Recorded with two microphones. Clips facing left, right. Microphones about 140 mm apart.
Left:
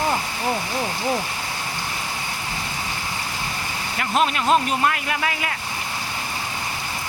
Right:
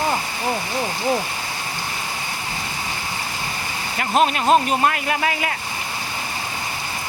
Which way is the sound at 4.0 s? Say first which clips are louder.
Right 3 dB; 35° right (ahead or behind).